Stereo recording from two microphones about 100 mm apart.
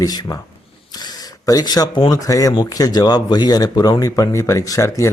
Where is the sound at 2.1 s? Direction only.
35° left (ahead or behind).